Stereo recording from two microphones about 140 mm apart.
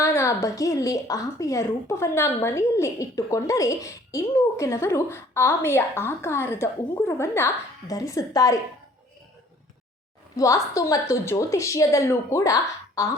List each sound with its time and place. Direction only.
0.0 s speech: 20° left (ahead or behind)
10.3 s speech: 25° left (ahead or behind)
13.0 s a sound: 20° left (ahead or behind)